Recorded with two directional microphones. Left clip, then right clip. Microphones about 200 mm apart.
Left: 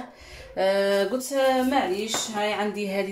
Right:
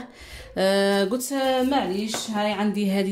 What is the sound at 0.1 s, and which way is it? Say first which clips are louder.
A woman's voice: right 2 dB; 55° right (ahead or behind).